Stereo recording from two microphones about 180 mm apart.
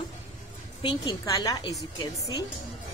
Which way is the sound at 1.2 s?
20° left (ahead or behind).